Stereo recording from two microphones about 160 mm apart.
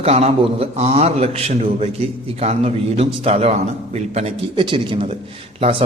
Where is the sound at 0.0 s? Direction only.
40° right (ahead or behind).